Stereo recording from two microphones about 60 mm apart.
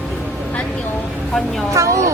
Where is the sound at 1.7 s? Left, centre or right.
Right.